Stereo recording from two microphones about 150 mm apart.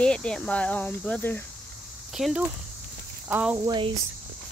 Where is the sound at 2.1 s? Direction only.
5° right (ahead or behind).